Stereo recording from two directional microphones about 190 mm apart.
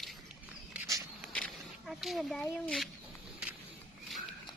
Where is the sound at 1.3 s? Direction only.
5° left (ahead or behind).